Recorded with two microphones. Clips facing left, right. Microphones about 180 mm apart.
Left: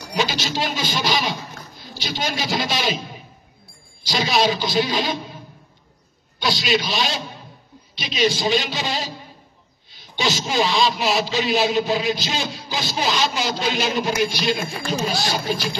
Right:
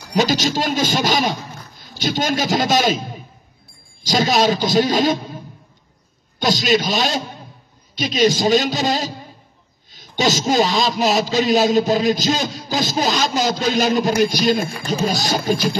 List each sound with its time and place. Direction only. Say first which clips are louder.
0.1 s a man's voice: right 6 dB; 45° right (ahead or behind)
4.0 s a man's voice: right 4 dB; 45° right (ahead or behind)
6.4 s a man's voice: right 4 dB; 45° right (ahead or behind)